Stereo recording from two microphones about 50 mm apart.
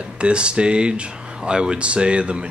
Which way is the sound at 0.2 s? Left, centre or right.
Right.